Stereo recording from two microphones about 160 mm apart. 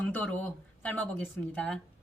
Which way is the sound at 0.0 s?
10° left (ahead or behind).